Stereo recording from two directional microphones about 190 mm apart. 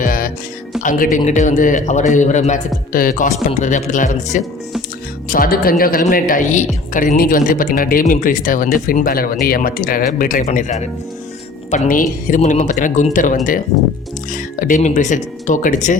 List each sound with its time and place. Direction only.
0.0 s music: 50° left (ahead or behind)
0.8 s a man's voice: 45° left (ahead or behind)